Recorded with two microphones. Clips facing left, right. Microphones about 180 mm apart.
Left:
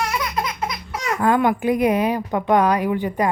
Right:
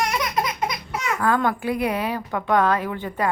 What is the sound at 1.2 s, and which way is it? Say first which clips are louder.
A woman's voice: left 4 dB; 20° left (ahead or behind).